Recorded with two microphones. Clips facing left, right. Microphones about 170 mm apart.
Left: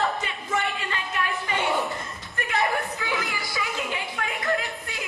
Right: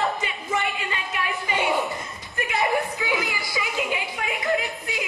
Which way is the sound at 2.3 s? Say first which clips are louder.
Right 1 dB; centre (ahead or behind).